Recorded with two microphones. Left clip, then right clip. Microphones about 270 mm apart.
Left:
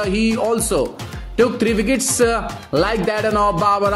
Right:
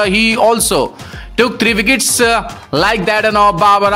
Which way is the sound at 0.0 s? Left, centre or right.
Right.